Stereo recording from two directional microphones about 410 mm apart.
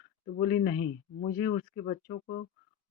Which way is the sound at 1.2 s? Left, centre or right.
Centre.